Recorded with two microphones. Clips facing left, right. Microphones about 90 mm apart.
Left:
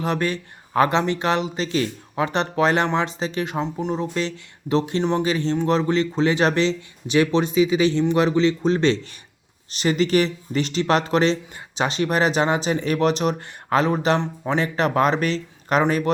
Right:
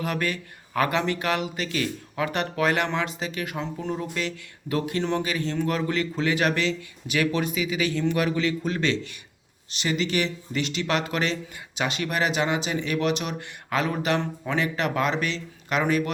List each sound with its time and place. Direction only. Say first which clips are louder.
0.0 s speech: left 4 dB; 30° left (ahead or behind)